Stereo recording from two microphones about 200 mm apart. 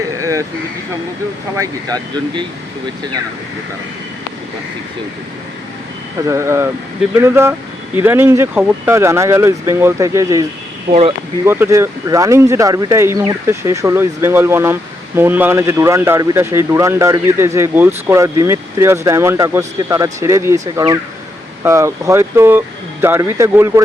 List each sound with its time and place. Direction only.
0.2 s a sound: 15° right (ahead or behind)
1.5 s speech: 20° right (ahead or behind)
6.2 s speech: 15° right (ahead or behind)
10.9 s speech: 30° right (ahead or behind)
11.4 s speech: 10° right (ahead or behind)